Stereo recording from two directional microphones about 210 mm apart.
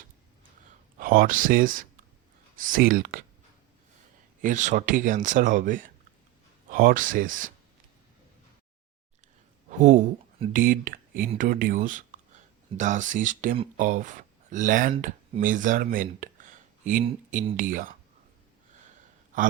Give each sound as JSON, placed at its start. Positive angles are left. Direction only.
{"t": 0.6, "sound": "a sound", "side_deg": -40}
{"t": 2.6, "sound": "speech", "side_deg": -40}
{"t": 4.4, "sound": "speech", "side_deg": -35}
{"t": 9.6, "sound": "speech", "side_deg": -40}
{"t": 17.0, "sound": "speech", "side_deg": -25}
{"t": 17.6, "sound": "speech", "side_deg": -40}